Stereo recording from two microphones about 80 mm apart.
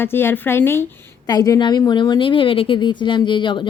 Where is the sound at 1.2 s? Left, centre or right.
Left.